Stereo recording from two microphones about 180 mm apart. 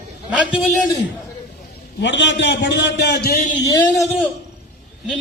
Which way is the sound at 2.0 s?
75° left (ahead or behind).